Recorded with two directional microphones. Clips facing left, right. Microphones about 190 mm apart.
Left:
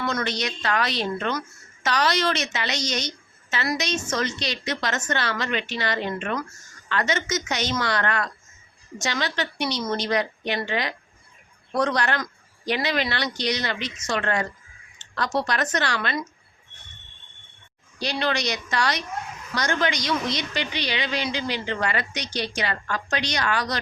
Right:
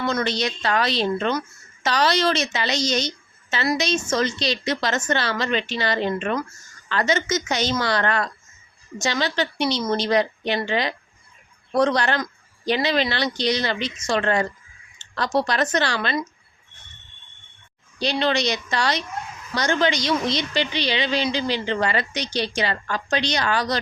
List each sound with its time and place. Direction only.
0.0 s a woman's voice: 25° right (ahead or behind)
18.0 s a woman's voice: 25° right (ahead or behind)